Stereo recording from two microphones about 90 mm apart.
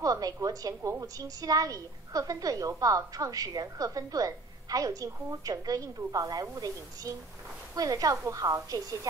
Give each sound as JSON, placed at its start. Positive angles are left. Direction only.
{"t": 0.0, "sound": "a woman's voice", "side_deg": -40}